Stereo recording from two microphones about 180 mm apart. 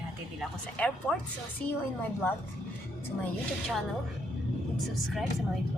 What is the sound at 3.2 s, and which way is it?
A woman's voice, centre (ahead or behind).